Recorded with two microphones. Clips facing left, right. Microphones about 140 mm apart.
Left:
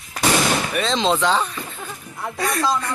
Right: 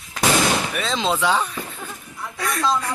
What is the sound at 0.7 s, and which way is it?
Speech, 5° right (ahead or behind).